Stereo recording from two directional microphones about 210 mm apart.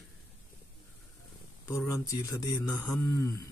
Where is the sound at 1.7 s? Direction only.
15° left (ahead or behind).